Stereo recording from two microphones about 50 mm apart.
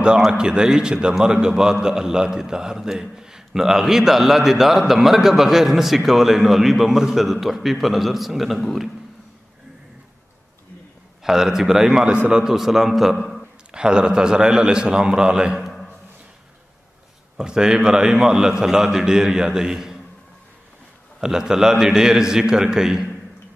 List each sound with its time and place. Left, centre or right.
0.3 s a man's voice: centre
11.2 s a man's voice: centre
13.7 s a man's voice: centre
17.4 s a man's voice: centre
21.2 s a man's voice: centre